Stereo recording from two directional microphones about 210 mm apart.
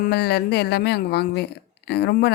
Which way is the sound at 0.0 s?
50° left (ahead or behind).